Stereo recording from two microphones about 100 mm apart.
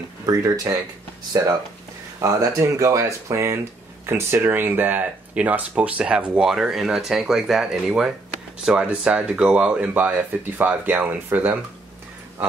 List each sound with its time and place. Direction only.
0.3 s speech: 35° right (ahead or behind); by 11.6 s 20° right (ahead or behind)